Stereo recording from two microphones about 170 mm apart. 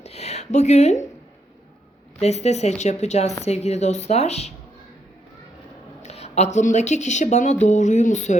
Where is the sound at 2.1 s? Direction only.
40° left (ahead or behind).